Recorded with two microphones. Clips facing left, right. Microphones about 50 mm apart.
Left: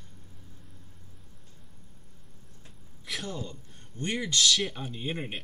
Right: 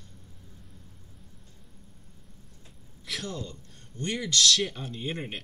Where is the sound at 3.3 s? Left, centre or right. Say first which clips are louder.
Even; centre.